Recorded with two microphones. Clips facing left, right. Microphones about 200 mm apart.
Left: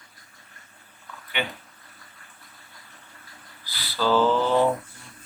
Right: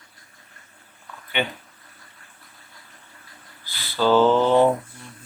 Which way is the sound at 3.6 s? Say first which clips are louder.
Right 4 dB; 25° right (ahead or behind).